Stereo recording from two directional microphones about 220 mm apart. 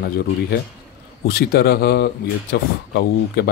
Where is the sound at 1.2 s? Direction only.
45° left (ahead or behind).